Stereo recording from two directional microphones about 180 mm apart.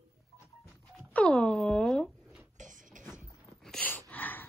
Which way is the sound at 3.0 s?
45° right (ahead or behind).